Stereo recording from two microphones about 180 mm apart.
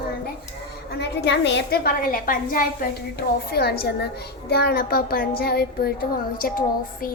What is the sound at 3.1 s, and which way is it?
A woman's voice, 60° left (ahead or behind).